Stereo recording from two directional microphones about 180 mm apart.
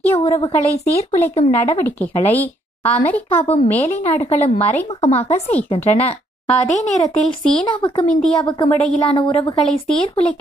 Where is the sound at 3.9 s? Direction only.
35° left (ahead or behind).